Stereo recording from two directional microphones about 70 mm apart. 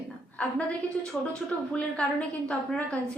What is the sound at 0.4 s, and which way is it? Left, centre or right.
A woman's voice, centre.